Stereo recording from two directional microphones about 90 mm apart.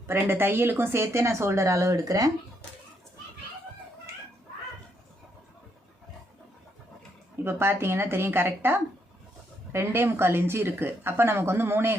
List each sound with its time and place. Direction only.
0.1 s speech: 25° right (ahead or behind)
7.4 s speech: 25° right (ahead or behind)